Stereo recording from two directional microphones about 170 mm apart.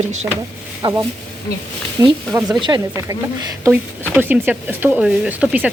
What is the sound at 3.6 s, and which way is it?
Speech, 10° right (ahead or behind).